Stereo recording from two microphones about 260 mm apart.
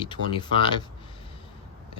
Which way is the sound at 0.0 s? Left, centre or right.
Centre.